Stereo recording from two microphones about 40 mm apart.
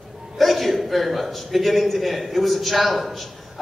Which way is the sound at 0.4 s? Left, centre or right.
Centre.